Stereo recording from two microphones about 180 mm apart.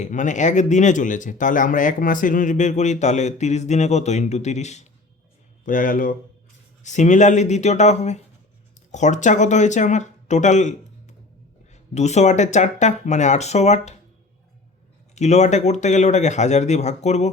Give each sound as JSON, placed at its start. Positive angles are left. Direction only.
{"t": 0.0, "sound": "speech", "side_deg": 45}
{"t": 15.1, "sound": "speech", "side_deg": 40}